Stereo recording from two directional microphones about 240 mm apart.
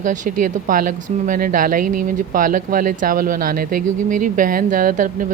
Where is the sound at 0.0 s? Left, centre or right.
Right.